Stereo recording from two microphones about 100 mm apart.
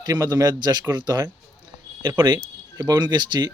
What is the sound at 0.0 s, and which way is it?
Speech, 40° right (ahead or behind).